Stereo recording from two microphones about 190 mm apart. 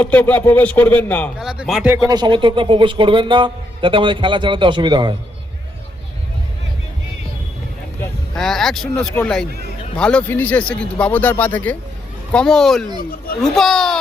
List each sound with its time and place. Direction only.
0.0 s a man's voice: 10° left (ahead or behind)
2.0 s speech: 20° right (ahead or behind)
8.4 s a man's voice: centre (ahead or behind)
13.0 s speech: 50° left (ahead or behind)
13.4 s speech: centre (ahead or behind)